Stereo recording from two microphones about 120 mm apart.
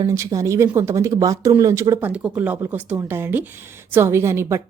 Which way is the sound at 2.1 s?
10° right (ahead or behind).